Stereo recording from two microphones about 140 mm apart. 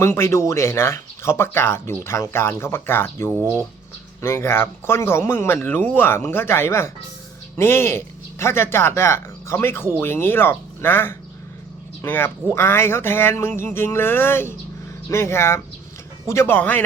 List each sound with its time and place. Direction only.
0.0 s speech: 20° left (ahead or behind)
3.3 s speech: 10° right (ahead or behind)
4.2 s speech: 20° left (ahead or behind)